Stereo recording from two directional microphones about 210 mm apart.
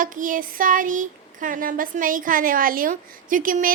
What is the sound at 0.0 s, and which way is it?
Speech, 40° right (ahead or behind).